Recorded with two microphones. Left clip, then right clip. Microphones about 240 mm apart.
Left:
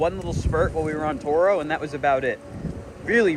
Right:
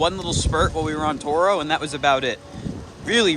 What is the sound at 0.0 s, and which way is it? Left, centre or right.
Speech, centre.